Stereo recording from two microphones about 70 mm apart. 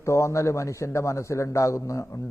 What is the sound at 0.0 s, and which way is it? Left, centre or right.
A man's voice, left.